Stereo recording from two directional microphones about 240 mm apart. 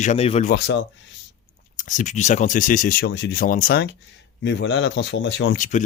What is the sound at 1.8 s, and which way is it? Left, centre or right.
Speech, left.